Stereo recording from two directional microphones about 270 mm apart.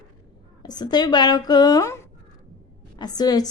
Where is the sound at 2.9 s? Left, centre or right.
Centre.